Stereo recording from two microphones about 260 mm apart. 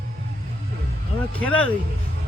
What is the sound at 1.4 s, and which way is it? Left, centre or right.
Speech, centre.